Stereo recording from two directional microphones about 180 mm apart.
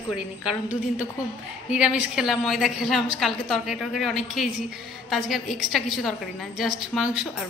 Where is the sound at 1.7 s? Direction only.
5° right (ahead or behind).